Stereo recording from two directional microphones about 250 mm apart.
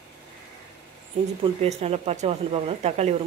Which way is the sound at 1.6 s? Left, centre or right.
Right.